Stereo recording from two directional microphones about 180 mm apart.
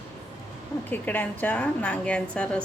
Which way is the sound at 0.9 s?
10° left (ahead or behind).